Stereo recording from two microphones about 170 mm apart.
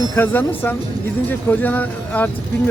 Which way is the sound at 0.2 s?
10° left (ahead or behind).